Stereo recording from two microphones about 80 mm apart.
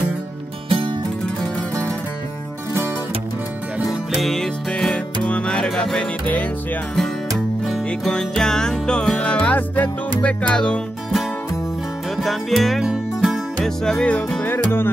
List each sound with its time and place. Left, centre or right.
0.7 s music: right
1.2 s music: centre
4.2 s music: centre
7.6 s music: centre
12.2 s music: centre
13.6 s music: centre
14.5 s music: left